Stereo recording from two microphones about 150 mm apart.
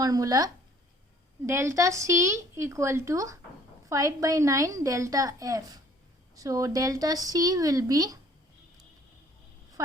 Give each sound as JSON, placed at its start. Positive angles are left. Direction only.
{"t": 0.0, "sound": "a woman's voice", "side_deg": -25}